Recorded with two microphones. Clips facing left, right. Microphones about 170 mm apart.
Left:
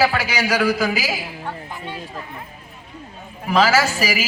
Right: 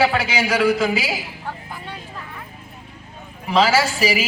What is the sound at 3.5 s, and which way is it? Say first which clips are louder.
Speech: even; 30° right (ahead or behind).